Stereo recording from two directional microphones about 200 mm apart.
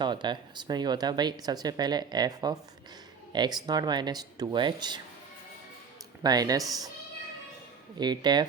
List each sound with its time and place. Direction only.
0.0 s speech: 20° right (ahead or behind)
6.2 s speech: 20° right (ahead or behind)
7.9 s speech: 20° right (ahead or behind)